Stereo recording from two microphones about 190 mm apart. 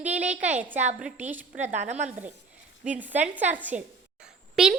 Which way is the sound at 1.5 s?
40° right (ahead or behind).